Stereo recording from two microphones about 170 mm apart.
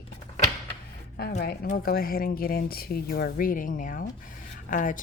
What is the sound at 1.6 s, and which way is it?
Speech, 60° left (ahead or behind).